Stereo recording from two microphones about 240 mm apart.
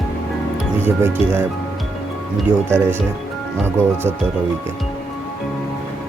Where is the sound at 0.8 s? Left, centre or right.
Centre.